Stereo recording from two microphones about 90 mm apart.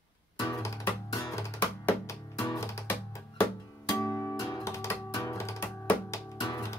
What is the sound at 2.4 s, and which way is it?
Music, 35° left (ahead or behind).